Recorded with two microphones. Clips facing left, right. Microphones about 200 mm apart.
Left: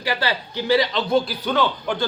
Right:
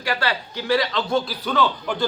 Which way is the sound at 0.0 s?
Centre (ahead or behind).